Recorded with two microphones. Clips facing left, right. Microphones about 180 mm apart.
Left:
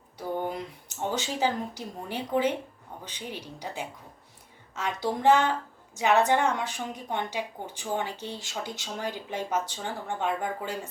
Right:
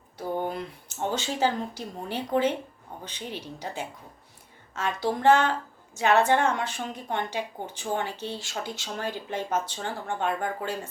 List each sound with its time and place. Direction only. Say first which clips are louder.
0.5 s a woman's voice: right 1 dB; 15° left (ahead or behind)